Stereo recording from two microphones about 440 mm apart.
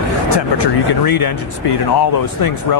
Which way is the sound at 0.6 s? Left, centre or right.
Left.